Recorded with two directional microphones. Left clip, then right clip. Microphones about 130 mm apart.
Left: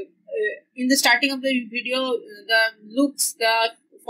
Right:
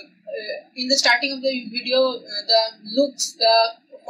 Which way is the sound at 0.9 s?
50° left (ahead or behind).